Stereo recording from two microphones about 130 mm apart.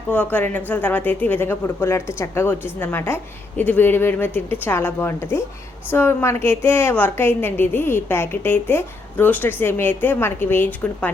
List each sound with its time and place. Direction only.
0.1 s a woman's voice: 10° left (ahead or behind)